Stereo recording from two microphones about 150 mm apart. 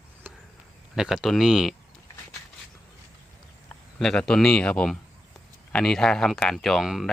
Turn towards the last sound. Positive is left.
turn(degrees=0)  # may be behind; listen again after turning